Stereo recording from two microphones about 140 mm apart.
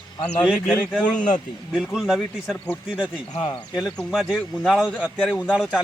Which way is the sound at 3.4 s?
30° left (ahead or behind).